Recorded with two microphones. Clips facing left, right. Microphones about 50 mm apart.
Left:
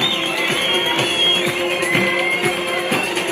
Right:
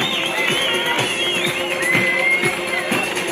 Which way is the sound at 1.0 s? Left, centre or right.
Left.